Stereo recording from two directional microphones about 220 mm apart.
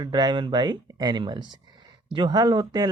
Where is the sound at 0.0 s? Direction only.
20° right (ahead or behind).